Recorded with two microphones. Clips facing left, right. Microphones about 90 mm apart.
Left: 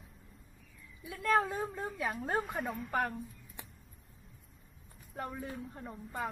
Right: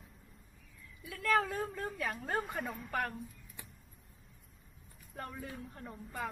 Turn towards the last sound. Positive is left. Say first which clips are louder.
# left 2 dB
turn(degrees=5)  # may be behind; listen again after turning